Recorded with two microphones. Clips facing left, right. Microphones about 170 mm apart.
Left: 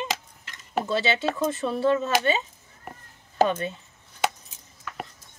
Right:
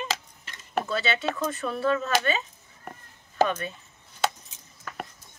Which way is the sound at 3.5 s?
25° left (ahead or behind).